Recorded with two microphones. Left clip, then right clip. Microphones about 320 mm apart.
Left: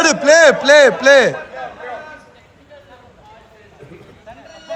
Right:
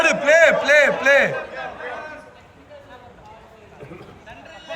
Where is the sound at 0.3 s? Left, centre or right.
Centre.